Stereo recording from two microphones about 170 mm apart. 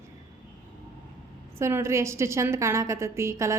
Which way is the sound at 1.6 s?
15° right (ahead or behind).